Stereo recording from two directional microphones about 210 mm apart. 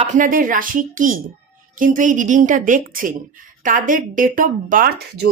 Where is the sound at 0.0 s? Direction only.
35° right (ahead or behind).